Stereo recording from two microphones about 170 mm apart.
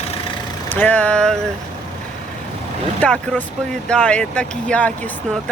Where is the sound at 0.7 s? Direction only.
10° left (ahead or behind).